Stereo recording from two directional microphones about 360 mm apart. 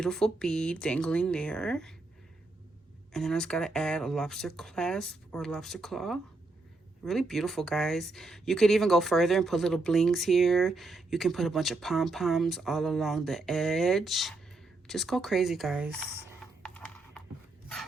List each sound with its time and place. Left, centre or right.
0.0 s speech: centre
3.1 s speech: centre
16.6 s music: centre